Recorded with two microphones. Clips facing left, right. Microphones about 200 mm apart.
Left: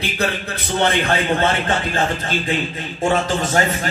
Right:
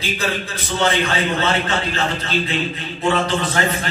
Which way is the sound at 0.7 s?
55° left (ahead or behind).